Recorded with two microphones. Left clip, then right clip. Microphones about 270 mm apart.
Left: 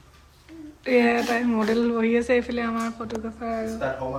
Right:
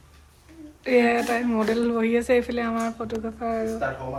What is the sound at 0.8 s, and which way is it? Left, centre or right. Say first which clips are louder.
Speech: even; centre.